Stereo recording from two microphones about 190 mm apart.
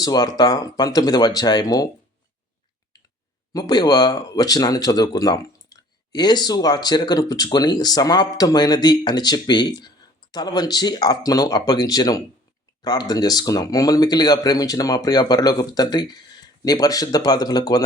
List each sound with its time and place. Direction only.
0.0 s speech: 20° left (ahead or behind)
3.5 s speech: 20° left (ahead or behind)